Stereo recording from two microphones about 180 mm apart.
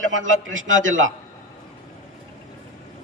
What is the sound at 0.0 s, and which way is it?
Speech, 90° right.